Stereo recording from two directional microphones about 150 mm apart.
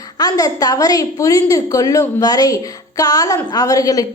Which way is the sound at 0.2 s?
25° left (ahead or behind).